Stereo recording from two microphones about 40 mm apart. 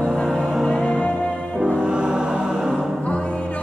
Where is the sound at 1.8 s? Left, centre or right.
Right.